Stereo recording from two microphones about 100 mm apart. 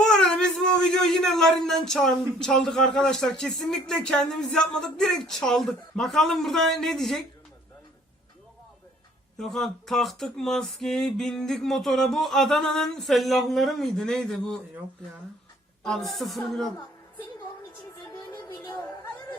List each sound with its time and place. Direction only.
0.0 s speech: 5° left (ahead or behind)
9.4 s speech: 5° left (ahead or behind)
15.8 s speech: 5° left (ahead or behind)
18.4 s music: 40° left (ahead or behind)